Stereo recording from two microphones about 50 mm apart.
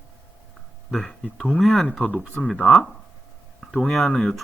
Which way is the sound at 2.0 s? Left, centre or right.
Left.